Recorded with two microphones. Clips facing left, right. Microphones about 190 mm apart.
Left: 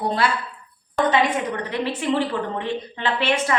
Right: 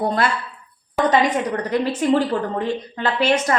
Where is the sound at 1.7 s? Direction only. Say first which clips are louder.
Right 7 dB; 45° right (ahead or behind).